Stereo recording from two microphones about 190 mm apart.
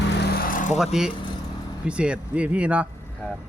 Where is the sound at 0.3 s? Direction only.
50° left (ahead or behind).